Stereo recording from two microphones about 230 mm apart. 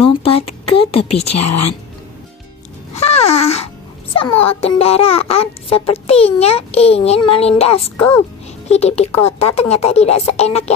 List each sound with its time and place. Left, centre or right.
0.0 s a sound: left
2.9 s music: left
4.5 s a child's voice: left